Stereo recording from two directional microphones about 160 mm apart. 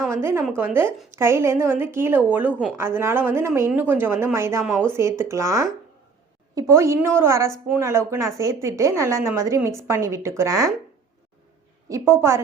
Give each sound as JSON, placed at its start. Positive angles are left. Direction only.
{"t": 0.1, "sound": "a woman's voice", "side_deg": -15}
{"t": 11.9, "sound": "a woman's voice", "side_deg": -20}